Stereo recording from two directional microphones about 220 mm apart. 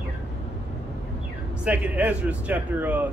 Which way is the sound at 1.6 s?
5° right (ahead or behind).